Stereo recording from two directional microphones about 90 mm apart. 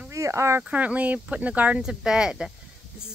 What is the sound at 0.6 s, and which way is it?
Speech, 15° right (ahead or behind).